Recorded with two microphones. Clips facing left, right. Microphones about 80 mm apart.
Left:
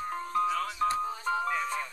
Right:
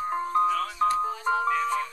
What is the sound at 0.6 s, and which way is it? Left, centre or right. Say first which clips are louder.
Music: right 4 dB; centre.